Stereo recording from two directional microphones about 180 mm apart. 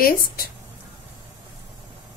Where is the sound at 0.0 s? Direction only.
55° left (ahead or behind).